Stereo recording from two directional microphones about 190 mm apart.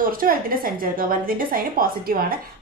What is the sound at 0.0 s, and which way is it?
A woman's voice, 50° right (ahead or behind).